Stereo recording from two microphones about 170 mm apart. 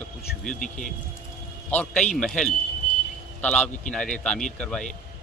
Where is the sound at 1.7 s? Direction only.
10° left (ahead or behind).